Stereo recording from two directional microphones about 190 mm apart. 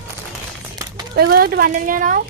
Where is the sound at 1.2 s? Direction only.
55° right (ahead or behind).